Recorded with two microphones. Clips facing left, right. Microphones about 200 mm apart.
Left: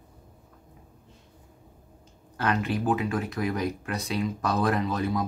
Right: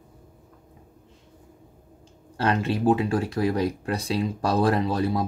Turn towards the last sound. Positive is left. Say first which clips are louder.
# right 3 dB
turn(degrees=-30)  # may be behind; listen again after turning